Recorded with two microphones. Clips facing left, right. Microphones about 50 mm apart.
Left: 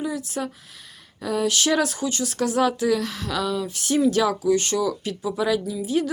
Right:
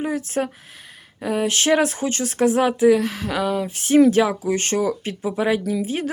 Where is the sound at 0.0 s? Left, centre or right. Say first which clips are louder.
Right 4 dB; right.